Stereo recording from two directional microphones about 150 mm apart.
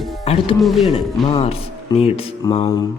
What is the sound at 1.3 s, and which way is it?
Speech, 40° left (ahead or behind).